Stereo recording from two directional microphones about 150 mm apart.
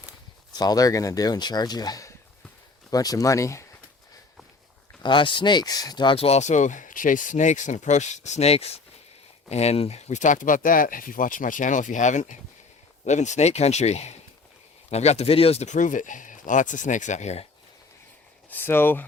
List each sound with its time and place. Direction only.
0.5 s speech: 25° left (ahead or behind)
5.0 s speech: 30° left (ahead or behind); by 17.4 s 50° left (ahead or behind)
18.5 s speech: 15° left (ahead or behind)